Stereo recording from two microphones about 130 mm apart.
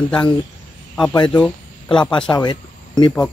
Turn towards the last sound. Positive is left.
turn(degrees=35)  # may be behind; listen again after turning